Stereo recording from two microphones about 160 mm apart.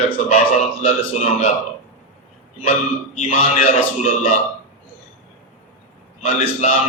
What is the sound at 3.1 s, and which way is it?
Speech, 45° left (ahead or behind).